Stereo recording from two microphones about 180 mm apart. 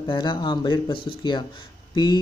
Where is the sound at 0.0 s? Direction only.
25° left (ahead or behind).